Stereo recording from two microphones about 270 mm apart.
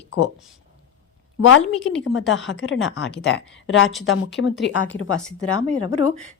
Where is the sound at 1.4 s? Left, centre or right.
Left.